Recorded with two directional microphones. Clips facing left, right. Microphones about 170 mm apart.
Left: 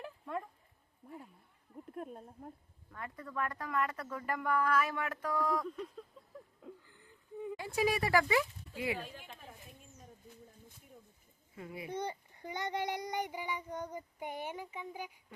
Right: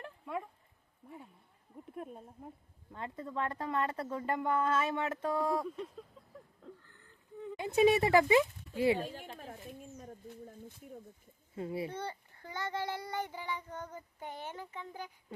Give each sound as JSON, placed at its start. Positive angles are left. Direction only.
{"t": 0.0, "sound": "a sound", "side_deg": -5}
{"t": 1.7, "sound": "speech", "side_deg": 0}
{"t": 2.9, "sound": "a woman's voice", "side_deg": -25}
{"t": 6.7, "sound": "a sound", "side_deg": 10}
{"t": 7.5, "sound": "speech", "side_deg": -20}
{"t": 11.5, "sound": "a child's voice", "side_deg": -30}
{"t": 11.9, "sound": "a child's voice", "side_deg": 15}